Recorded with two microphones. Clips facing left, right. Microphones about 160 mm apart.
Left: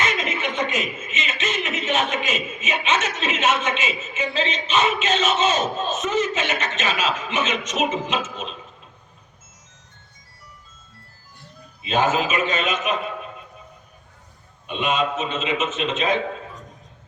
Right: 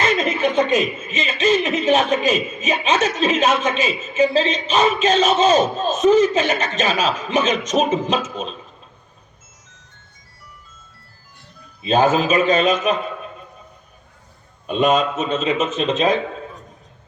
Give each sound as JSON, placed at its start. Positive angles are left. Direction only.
{"t": 0.0, "sound": "a man's voice", "side_deg": -35}
{"t": 11.8, "sound": "a man's voice", "side_deg": -35}
{"t": 14.7, "sound": "a man's voice", "side_deg": -40}